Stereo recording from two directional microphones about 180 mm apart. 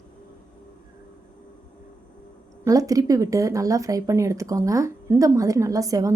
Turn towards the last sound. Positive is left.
turn(degrees=-20)  # may be behind; listen again after turning